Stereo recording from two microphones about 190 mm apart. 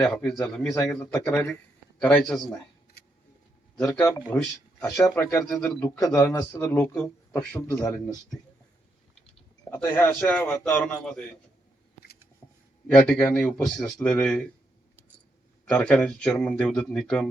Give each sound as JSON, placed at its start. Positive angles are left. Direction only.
{"t": 0.0, "sound": "a man's voice", "side_deg": 0}
{"t": 4.3, "sound": "a man's voice", "side_deg": 10}
{"t": 9.6, "sound": "a man's voice", "side_deg": 10}
{"t": 12.4, "sound": "a sound", "side_deg": 10}
{"t": 12.9, "sound": "speech", "side_deg": 10}
{"t": 15.7, "sound": "speech", "side_deg": 5}